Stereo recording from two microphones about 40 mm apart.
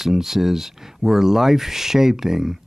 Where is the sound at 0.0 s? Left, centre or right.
Centre.